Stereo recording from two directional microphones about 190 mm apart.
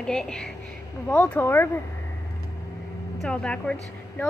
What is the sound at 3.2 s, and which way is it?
Speech, 5° left (ahead or behind).